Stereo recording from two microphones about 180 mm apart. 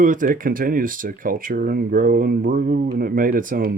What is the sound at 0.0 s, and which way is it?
Speech, 45° right (ahead or behind).